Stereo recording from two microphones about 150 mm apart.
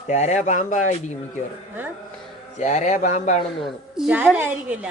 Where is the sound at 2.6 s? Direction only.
50° left (ahead or behind).